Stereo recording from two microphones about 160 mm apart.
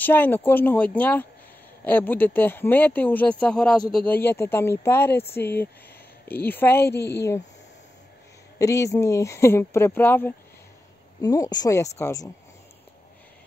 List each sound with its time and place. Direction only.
0.0 s speech: 10° left (ahead or behind)
6.9 s a woman's voice: 90° left
7.2 s speech: 15° left (ahead or behind)
8.5 s a woman's voice: 20° left (ahead or behind)